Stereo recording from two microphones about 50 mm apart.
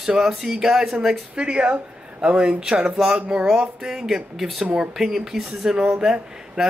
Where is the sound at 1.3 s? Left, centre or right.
Centre.